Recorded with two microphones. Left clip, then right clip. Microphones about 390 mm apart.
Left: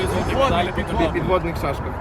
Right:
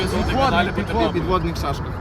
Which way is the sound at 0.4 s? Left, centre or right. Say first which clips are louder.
Right 1 dB; centre.